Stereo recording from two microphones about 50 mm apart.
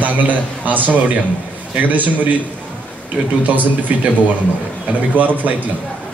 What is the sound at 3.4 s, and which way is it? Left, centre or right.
A man's voice, right.